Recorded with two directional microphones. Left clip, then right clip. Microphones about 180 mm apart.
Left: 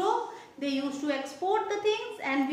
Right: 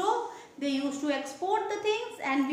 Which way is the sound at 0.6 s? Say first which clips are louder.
Right 1 dB; 10° right (ahead or behind).